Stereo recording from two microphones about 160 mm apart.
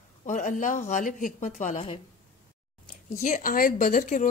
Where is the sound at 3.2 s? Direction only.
55° left (ahead or behind).